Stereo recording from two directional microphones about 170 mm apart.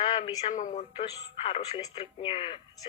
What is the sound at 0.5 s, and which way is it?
Speech, 45° left (ahead or behind).